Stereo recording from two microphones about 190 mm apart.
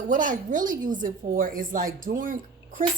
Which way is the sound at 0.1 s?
45° right (ahead or behind).